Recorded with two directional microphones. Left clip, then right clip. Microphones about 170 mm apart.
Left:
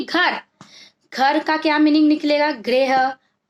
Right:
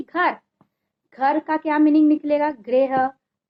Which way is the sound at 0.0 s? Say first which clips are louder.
Left 3 dB; 20° left (ahead or behind).